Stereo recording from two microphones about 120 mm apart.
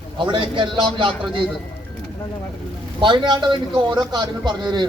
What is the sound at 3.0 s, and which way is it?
A man's voice, 40° right (ahead or behind).